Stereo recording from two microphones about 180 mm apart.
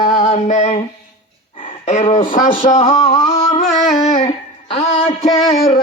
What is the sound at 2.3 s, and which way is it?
Music, 50° left (ahead or behind).